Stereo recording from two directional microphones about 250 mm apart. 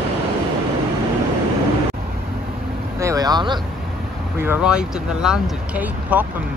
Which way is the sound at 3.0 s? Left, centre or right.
Centre.